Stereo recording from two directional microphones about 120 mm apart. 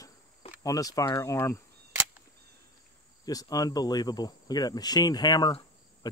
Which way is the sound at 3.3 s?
30° left (ahead or behind).